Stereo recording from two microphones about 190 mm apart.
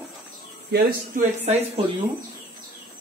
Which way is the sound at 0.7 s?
55° right (ahead or behind).